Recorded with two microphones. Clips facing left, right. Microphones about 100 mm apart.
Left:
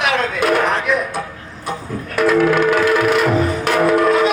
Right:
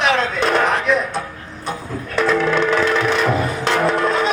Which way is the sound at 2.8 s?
25° right (ahead or behind).